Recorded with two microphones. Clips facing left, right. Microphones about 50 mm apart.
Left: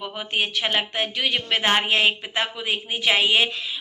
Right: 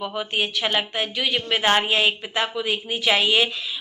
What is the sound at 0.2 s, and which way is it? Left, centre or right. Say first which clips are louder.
A woman's voice: even; left.